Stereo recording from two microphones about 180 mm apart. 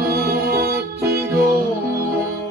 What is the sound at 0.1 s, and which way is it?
Music, 60° right (ahead or behind).